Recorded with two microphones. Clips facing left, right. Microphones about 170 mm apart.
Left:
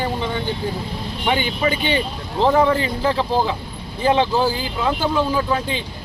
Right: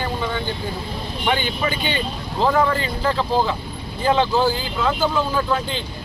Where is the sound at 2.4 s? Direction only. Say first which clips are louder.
Left 3 dB; 20° left (ahead or behind).